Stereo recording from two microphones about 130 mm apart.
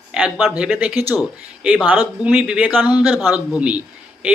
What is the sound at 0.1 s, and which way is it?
Speech, 5° right (ahead or behind).